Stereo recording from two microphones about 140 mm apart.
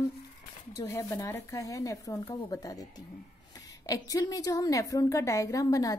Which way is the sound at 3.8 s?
25° left (ahead or behind).